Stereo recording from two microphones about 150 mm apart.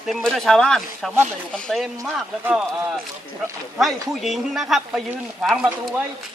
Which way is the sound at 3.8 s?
Centre (ahead or behind).